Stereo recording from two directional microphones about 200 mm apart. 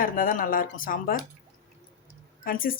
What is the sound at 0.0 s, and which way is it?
Speech, 45° left (ahead or behind).